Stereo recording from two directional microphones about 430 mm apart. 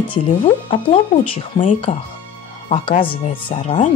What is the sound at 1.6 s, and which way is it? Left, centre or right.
Speech, centre.